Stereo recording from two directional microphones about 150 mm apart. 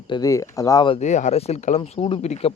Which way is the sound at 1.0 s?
50° left (ahead or behind).